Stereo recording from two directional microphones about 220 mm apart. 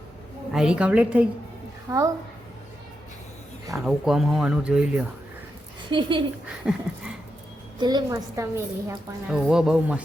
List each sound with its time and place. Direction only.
0.5 s a woman's voice: 5° right (ahead or behind)
3.8 s speech: centre (ahead or behind)
5.9 s a woman's voice: 20° right (ahead or behind)
6.7 s a sound: 5° right (ahead or behind)
7.8 s a woman's voice: 20° right (ahead or behind); by 10.0 s 5° right (ahead or behind)